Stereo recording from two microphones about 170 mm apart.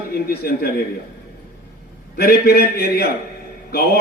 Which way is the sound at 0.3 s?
65° left (ahead or behind).